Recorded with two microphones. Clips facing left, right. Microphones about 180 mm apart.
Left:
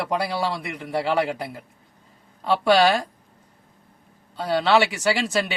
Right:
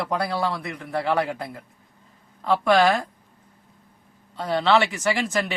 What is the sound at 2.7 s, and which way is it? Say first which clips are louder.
Speech: left 1 dB; 10° left (ahead or behind).